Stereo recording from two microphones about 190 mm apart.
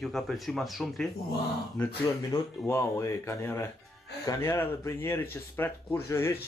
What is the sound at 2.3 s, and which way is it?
Speech, 20° left (ahead or behind).